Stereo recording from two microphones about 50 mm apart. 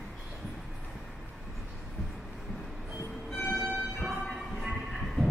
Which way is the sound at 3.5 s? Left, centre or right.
Centre.